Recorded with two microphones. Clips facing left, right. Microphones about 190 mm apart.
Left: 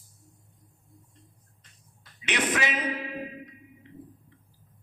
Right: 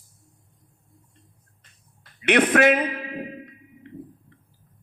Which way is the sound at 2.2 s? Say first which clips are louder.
Right 11 dB; 60° right (ahead or behind).